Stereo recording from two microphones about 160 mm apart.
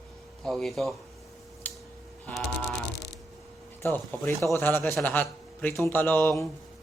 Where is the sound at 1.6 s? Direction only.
10° left (ahead or behind).